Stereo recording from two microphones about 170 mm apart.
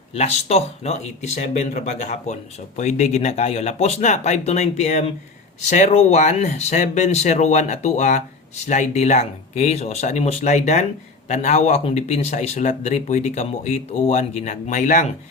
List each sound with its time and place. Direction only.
0.1 s speech: 40° left (ahead or behind)